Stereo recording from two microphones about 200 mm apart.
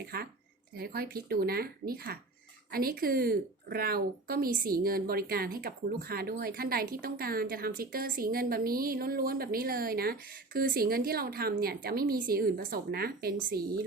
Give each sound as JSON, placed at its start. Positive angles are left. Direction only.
{"t": 0.0, "sound": "a woman's voice", "side_deg": -50}